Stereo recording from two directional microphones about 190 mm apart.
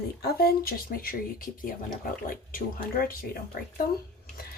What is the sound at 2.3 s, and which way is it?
Speech, 50° left (ahead or behind).